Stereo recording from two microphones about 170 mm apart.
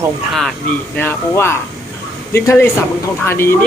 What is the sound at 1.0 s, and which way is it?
Speech, 15° left (ahead or behind).